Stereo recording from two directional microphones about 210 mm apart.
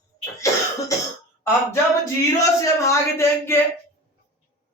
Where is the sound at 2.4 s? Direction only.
15° left (ahead or behind).